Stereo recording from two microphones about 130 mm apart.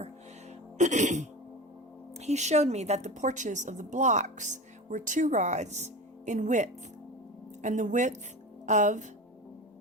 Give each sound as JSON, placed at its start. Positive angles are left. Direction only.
{"t": 0.8, "sound": "music", "side_deg": -65}
{"t": 2.1, "sound": "a woman's voice", "side_deg": -60}